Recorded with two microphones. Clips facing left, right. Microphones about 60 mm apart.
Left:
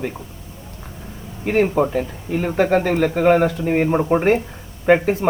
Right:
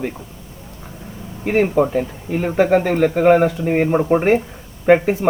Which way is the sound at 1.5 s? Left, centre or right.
Centre.